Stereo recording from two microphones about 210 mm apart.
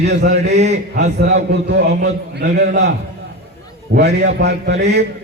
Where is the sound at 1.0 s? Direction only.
55° right (ahead or behind).